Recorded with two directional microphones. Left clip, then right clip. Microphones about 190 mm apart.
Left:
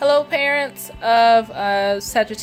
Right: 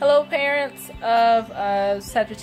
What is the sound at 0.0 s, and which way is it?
Music, 25° left (ahead or behind).